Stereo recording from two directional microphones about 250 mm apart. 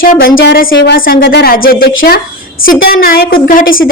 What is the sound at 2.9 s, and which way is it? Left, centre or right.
Speech, left.